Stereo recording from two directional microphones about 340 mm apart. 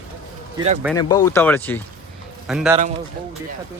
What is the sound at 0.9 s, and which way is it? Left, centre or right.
A man's voice, centre.